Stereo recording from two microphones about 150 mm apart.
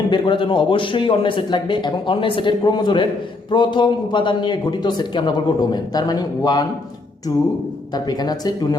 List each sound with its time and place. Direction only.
0.1 s a man's voice: 30° left (ahead or behind)
7.9 s a man's voice: 25° left (ahead or behind)